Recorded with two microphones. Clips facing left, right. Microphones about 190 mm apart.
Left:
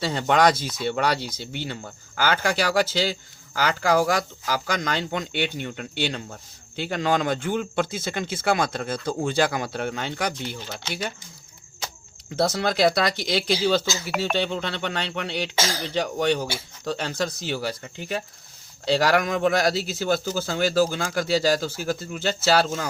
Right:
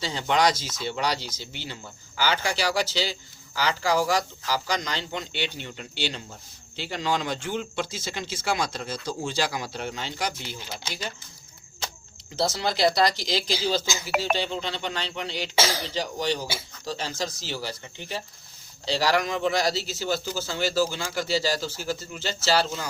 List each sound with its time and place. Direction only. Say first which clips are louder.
0.0 s speech: left 4 dB; 55° left (ahead or behind)
12.4 s speech: left 3 dB; 55° left (ahead or behind)
13.8 s speech: even; 15° right (ahead or behind)
14.3 s speech: left 3 dB; 60° left (ahead or behind)
18.9 s speech: left 4 dB; 55° left (ahead or behind)